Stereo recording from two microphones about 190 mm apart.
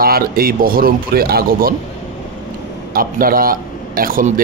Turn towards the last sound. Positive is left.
turn(degrees=-45)  # may be behind; listen again after turning